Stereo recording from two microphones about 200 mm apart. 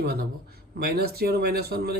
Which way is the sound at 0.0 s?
50° right (ahead or behind).